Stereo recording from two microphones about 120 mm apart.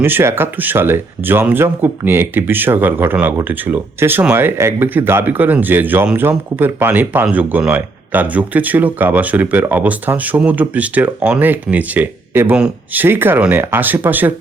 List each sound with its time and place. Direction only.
0.0 s speech: 20° right (ahead or behind)